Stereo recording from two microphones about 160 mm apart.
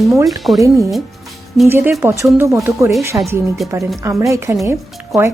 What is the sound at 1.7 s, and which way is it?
Speech, 15° right (ahead or behind).